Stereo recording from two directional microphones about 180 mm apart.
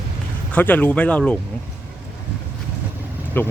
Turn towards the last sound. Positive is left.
turn(degrees=10)  # may be behind; listen again after turning